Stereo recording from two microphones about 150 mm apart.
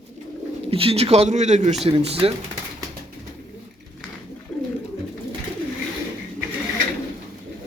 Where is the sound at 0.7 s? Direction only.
40° right (ahead or behind).